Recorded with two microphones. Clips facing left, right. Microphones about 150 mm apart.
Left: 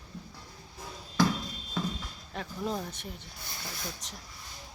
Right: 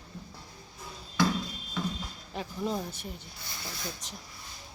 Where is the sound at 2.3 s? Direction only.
Centre (ahead or behind).